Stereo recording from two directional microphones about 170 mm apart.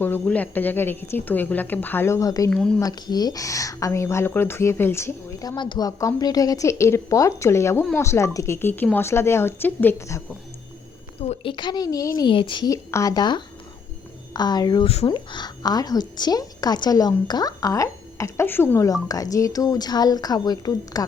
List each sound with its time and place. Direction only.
0.0 s a woman's voice: 10° left (ahead or behind)
2.5 s a woman's voice: 5° left (ahead or behind)
2.8 s a woman's voice: 25° left (ahead or behind)
11.2 s speech: 35° left (ahead or behind)